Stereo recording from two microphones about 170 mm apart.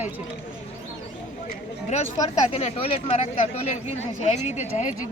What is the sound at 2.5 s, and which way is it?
Speech, 40° left (ahead or behind).